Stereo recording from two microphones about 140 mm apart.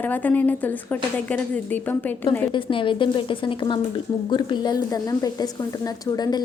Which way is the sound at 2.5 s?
35° left (ahead or behind).